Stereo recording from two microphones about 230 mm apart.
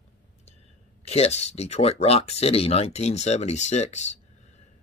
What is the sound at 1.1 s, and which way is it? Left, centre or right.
Speech, left.